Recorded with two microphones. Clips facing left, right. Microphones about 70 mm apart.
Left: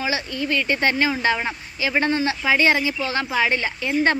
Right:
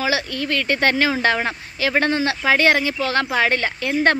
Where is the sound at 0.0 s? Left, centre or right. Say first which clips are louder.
Right 3 dB; right.